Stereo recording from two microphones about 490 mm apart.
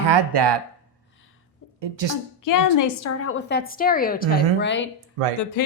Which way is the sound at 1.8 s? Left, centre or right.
Right.